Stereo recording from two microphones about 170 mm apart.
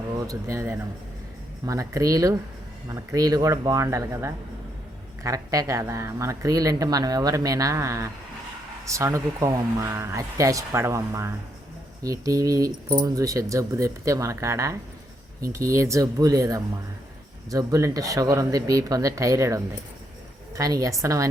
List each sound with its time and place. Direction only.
0.2 s speech: 20° right (ahead or behind)